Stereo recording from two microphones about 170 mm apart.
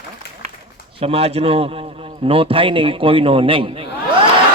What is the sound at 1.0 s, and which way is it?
A man's voice, 35° right (ahead or behind).